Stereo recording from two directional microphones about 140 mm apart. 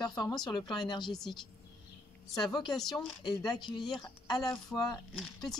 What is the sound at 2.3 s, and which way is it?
A woman's voice, 30° left (ahead or behind).